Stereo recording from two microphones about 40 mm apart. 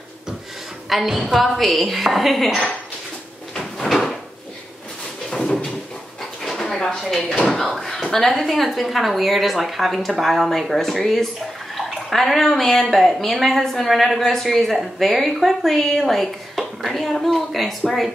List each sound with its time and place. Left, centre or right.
0.8 s a woman's voice: centre
3.5 s cupboard open or close: centre
5.3 s a sound: centre
6.6 s dishes: centre
7.4 s a woman's voice: centre